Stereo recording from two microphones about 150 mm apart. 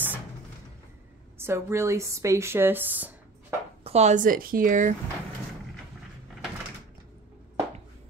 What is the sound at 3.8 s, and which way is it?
Speech, 45° right (ahead or behind).